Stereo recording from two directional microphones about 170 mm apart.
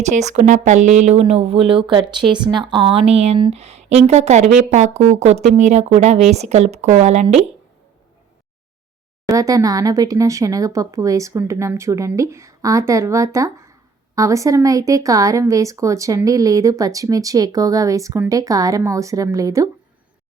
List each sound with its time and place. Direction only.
0.0 s speech: 45° right (ahead or behind)
9.3 s speech: 20° right (ahead or behind)